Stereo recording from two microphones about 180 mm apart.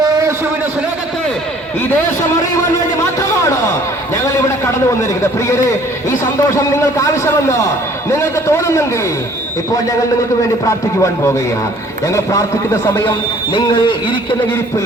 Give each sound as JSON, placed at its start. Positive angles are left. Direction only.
{"t": 3.2, "sound": "a sound", "side_deg": 15}
{"t": 4.1, "sound": "a man's voice", "side_deg": 15}
{"t": 11.0, "sound": "a man's voice", "side_deg": 15}
{"t": 13.5, "sound": "a man's voice", "side_deg": 25}